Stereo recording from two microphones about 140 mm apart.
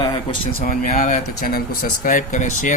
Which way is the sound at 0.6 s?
60° left (ahead or behind).